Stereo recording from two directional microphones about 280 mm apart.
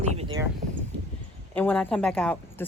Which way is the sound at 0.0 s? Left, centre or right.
Right.